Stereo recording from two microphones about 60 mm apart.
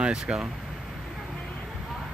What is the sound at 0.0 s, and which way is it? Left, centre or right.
Speech, centre.